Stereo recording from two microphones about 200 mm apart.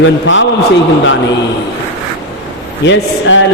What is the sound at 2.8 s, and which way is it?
Mantra, 65° left (ahead or behind).